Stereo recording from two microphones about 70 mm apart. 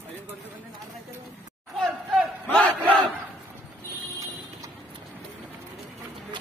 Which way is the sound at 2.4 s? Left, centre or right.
Centre.